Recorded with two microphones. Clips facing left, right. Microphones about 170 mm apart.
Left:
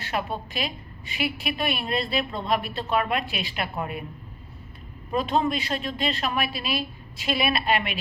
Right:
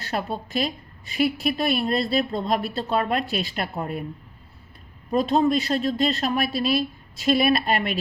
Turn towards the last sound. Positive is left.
turn(degrees=-40)  # may be behind; listen again after turning